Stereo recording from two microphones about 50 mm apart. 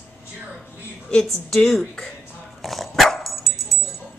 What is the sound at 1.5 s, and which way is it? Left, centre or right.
Speech, centre.